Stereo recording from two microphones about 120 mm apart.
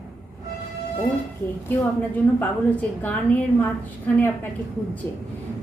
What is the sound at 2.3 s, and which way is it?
Speech, 15° left (ahead or behind).